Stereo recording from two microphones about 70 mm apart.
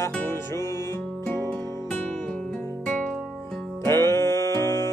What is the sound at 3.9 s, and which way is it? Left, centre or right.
Music, left.